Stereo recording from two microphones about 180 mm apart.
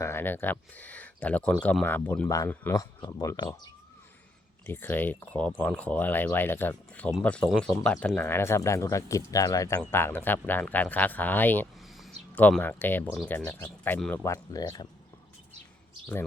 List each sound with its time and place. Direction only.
0.0 s speech: 10° left (ahead or behind)
4.6 s speech: 10° left (ahead or behind)
11.8 s a sound: centre (ahead or behind)
12.3 s speech: 10° left (ahead or behind)